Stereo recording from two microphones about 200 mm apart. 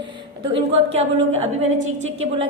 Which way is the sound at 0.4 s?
30° right (ahead or behind).